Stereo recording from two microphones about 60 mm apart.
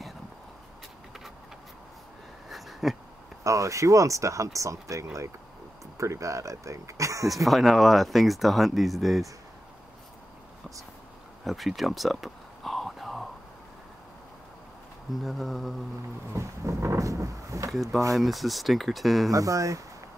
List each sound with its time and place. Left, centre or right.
2.5 s a sound: centre
3.4 s speech: right
7.4 s speech: centre
11.4 s a sound: centre
15.2 s speech: centre
16.3 s speech: right
17.6 s speech: centre
19.3 s speech: right